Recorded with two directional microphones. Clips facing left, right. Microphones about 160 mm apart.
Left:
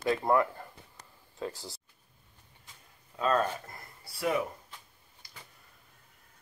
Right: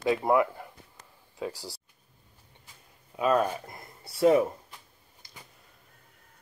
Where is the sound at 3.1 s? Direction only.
15° right (ahead or behind).